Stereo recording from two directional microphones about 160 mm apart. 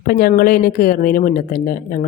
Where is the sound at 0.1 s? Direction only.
65° left (ahead or behind).